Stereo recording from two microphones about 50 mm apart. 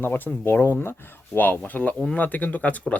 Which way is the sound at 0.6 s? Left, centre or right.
Left.